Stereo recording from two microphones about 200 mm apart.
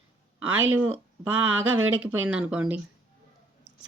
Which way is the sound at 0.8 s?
10° right (ahead or behind).